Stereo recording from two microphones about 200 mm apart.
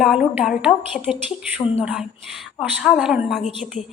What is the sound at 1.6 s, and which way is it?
Speech, 10° left (ahead or behind).